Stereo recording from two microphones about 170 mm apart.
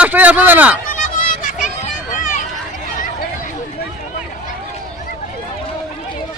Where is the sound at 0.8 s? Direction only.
50° left (ahead or behind).